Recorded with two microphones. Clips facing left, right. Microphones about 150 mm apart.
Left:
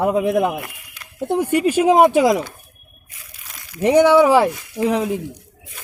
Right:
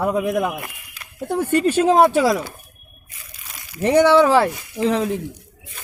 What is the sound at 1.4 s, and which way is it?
Speech, 10° left (ahead or behind).